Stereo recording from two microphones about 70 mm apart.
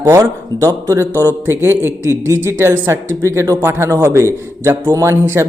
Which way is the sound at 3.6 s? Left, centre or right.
Right.